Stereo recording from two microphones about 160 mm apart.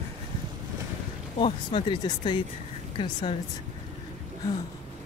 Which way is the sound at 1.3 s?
35° left (ahead or behind).